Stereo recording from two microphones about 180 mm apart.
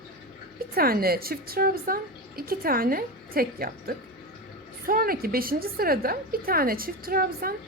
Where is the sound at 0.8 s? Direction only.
55° right (ahead or behind).